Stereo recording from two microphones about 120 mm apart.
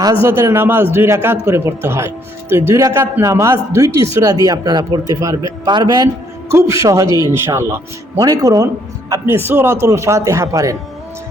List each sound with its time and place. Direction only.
0.0 s speech: 25° right (ahead or behind)